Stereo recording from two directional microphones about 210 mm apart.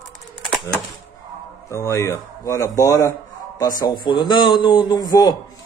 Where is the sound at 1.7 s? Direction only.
15° left (ahead or behind).